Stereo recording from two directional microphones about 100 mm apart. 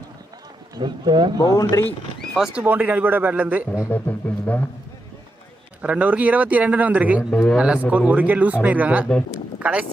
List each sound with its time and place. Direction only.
0.7 s speech: 45° right (ahead or behind)
1.4 s speech: 35° left (ahead or behind)
2.1 s horse: centre (ahead or behind)
2.6 s speech: 15° right (ahead or behind)
3.9 s a sound: 15° left (ahead or behind)
5.8 s speech: 15° right (ahead or behind)